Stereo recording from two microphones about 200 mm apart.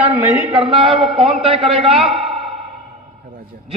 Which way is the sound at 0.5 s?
25° right (ahead or behind).